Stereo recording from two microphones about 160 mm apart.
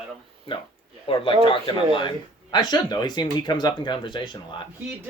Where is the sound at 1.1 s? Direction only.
35° left (ahead or behind).